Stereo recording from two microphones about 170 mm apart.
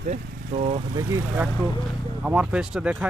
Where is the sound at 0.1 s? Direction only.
35° right (ahead or behind).